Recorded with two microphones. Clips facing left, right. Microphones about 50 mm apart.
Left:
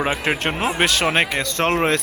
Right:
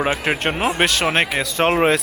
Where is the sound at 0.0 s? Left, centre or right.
Centre.